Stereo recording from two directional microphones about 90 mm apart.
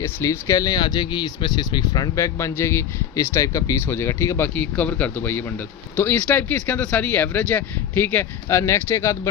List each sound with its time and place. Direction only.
0.0 s speech: 35° left (ahead or behind)
3.8 s speech: 25° left (ahead or behind)
4.4 s speech: 20° left (ahead or behind)